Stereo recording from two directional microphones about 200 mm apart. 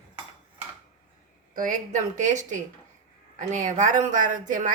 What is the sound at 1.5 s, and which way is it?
A woman's voice, 40° right (ahead or behind).